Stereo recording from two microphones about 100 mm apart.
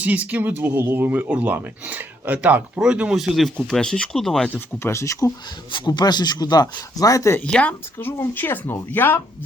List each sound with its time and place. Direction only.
0.0 s speech: 15° right (ahead or behind); by 4.4 s 5° left (ahead or behind)
4.4 s speech: 25° left (ahead or behind)
5.7 s speech: 50° left (ahead or behind); by 7.3 s 35° left (ahead or behind)
7.3 s speech: 10° left (ahead or behind)
7.9 s speech: 20° left (ahead or behind)